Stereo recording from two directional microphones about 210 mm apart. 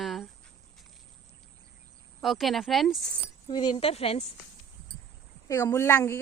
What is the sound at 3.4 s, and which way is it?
Speech, 25° left (ahead or behind).